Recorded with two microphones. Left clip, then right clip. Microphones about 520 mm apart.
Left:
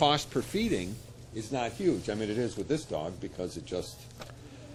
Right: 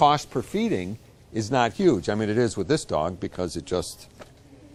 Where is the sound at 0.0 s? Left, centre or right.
Right.